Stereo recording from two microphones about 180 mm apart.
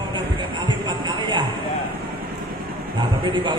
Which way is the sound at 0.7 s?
25° right (ahead or behind).